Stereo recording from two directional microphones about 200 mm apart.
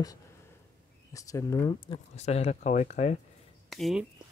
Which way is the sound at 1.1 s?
15° left (ahead or behind).